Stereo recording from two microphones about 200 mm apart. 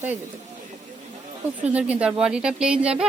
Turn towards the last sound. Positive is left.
turn(degrees=-5)  # may be behind; listen again after turning